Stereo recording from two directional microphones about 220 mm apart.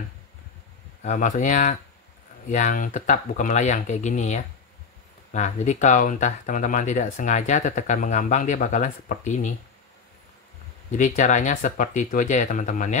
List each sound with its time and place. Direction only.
1.0 s speech: 35° left (ahead or behind)
10.9 s speech: 35° left (ahead or behind)